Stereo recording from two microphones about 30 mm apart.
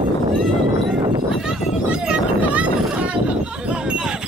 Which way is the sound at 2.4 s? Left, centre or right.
Right.